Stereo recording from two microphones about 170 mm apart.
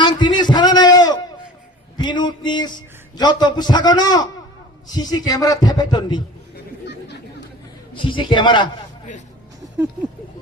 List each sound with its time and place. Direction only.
0.0 s a sound: 25° left (ahead or behind)
2.0 s a man's voice: 25° left (ahead or behind)
8.0 s a man's voice: 30° left (ahead or behind)